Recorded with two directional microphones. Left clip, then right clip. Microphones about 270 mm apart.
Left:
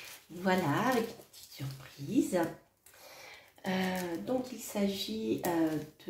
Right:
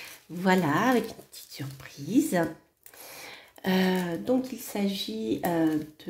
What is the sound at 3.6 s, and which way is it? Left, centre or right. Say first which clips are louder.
Speech: right 8 dB; right.